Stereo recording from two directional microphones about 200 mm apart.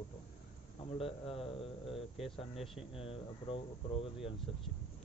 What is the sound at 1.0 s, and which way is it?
Speech, 25° left (ahead or behind).